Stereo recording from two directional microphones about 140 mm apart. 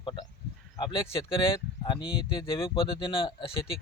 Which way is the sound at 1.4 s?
35° left (ahead or behind).